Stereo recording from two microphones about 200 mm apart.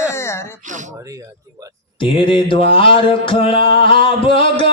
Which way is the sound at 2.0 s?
25° left (ahead or behind).